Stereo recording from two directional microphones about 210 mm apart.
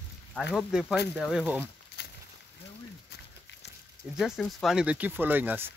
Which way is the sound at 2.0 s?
50° left (ahead or behind).